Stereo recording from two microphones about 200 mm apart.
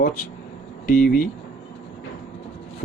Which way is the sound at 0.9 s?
40° left (ahead or behind).